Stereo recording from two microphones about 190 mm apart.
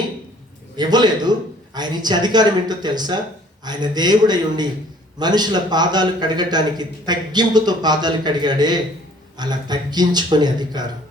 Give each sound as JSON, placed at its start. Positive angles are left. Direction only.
{"t": 0.8, "sound": "a man's voice", "side_deg": -20}